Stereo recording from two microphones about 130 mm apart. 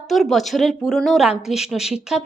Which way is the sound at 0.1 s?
Centre (ahead or behind).